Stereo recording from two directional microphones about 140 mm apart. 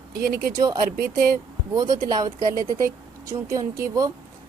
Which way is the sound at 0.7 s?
80° right.